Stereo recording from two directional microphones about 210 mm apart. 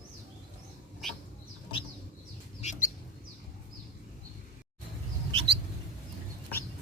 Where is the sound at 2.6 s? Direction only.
35° left (ahead or behind).